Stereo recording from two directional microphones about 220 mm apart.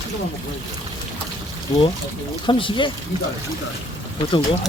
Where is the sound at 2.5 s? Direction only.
20° left (ahead or behind).